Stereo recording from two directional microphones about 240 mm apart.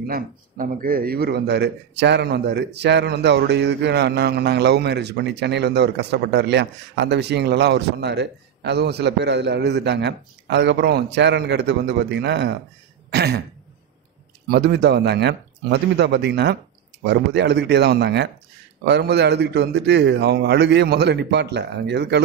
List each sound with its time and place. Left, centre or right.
0.0 s speech: right
14.5 s speech: right